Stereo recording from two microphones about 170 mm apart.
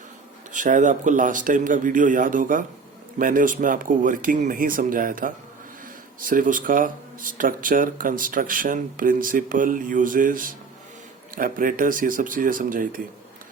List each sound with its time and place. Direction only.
0.5 s speech: 50° right (ahead or behind)